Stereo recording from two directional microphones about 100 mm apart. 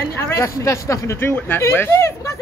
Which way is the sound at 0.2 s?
30° left (ahead or behind).